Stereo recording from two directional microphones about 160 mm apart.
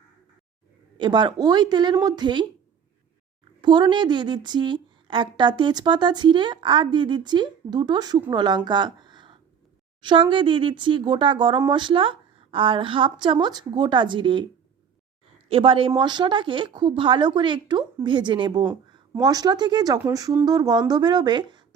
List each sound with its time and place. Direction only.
0.9 s a woman's voice: 30° right (ahead or behind)
3.6 s a woman's voice: 30° right (ahead or behind)
15.4 s a woman's voice: 35° right (ahead or behind)